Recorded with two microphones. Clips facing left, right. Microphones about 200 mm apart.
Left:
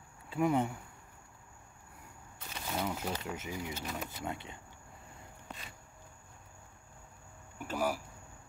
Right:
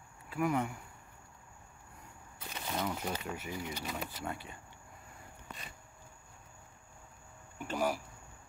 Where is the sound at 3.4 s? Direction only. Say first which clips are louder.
Even; 20° left (ahead or behind).